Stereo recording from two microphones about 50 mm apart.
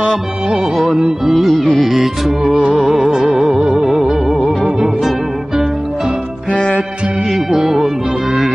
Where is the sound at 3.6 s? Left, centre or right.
Centre.